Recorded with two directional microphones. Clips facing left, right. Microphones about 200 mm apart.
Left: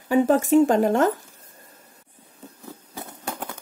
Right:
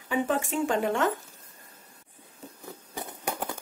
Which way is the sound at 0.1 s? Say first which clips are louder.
Left 10 dB; 40° left (ahead or behind).